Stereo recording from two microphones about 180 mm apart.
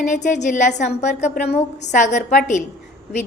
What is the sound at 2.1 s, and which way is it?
Speech, 45° left (ahead or behind).